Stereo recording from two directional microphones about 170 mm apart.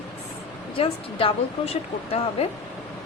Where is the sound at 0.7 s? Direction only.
35° left (ahead or behind).